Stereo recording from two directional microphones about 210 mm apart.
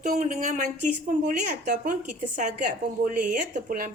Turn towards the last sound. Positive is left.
turn(degrees=-40)  # may be behind; listen again after turning